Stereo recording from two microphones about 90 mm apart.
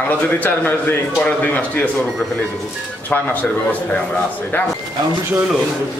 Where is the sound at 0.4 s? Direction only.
20° left (ahead or behind).